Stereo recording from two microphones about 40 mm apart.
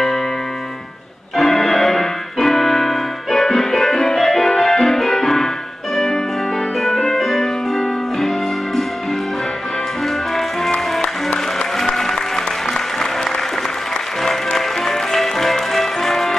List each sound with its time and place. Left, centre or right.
1.3 s keyboard: centre
6.8 s music: centre
10.7 s music: left
11.8 s music: centre
14.2 s music: centre